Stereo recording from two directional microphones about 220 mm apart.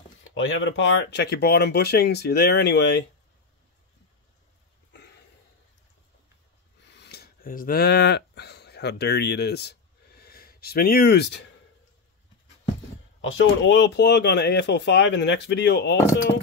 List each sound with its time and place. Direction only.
0.2 s speech: 60° left (ahead or behind)
6.8 s a sound: 50° left (ahead or behind)
13.4 s speech: 55° left (ahead or behind)